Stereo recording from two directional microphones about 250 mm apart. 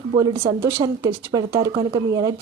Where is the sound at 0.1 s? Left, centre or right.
Right.